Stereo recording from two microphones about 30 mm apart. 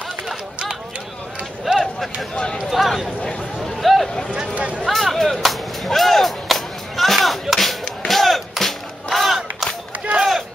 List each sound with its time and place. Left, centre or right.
1.6 s a sound: centre
2.8 s speech: centre
3.7 s a sound: centre
4.6 s speech: right
4.8 s whip: centre
8.1 s battle cry: centre